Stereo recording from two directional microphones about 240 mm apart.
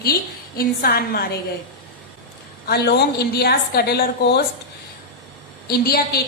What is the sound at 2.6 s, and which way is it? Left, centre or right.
A woman's voice, left.